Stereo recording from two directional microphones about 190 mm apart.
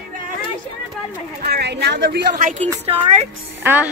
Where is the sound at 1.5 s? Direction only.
60° right (ahead or behind); by 2.7 s 45° right (ahead or behind).